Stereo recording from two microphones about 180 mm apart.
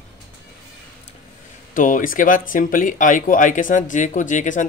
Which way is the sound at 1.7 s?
50° left (ahead or behind).